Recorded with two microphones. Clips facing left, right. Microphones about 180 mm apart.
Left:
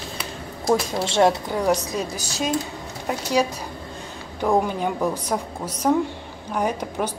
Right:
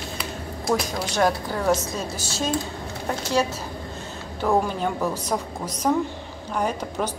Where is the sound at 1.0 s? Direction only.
25° left (ahead or behind).